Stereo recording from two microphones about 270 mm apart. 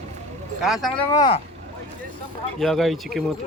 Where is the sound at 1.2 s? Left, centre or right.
Centre.